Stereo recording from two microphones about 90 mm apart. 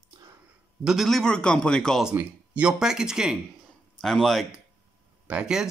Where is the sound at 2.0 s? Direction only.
15° right (ahead or behind).